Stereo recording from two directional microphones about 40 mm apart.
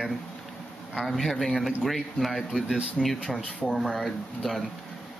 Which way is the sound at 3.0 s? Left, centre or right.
Left.